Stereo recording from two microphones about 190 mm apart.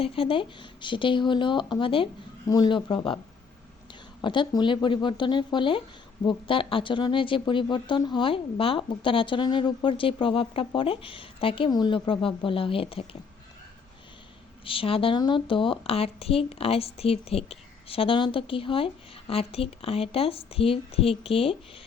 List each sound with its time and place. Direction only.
0.0 s speech: 30° left (ahead or behind)
4.2 s speech: 25° left (ahead or behind)
14.6 s speech: 30° left (ahead or behind)